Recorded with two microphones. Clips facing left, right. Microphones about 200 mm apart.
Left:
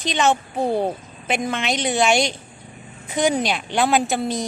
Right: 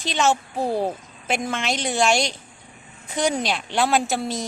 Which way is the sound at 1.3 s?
Centre (ahead or behind).